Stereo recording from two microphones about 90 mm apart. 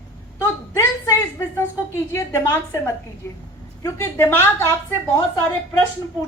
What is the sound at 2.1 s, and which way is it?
Speech, 35° left (ahead or behind).